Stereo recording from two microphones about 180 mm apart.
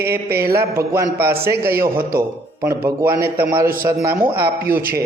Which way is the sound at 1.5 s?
60° right (ahead or behind).